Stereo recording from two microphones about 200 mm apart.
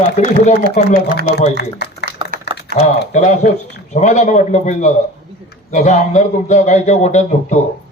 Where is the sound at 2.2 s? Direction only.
25° right (ahead or behind).